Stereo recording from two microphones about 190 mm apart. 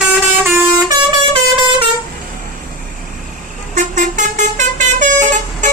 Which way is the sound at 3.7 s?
40° right (ahead or behind).